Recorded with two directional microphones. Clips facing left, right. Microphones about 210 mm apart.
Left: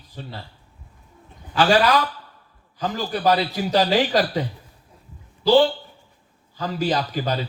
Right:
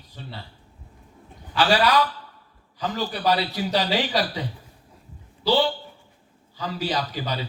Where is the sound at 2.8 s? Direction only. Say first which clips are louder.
Left 2 dB; 50° left (ahead or behind).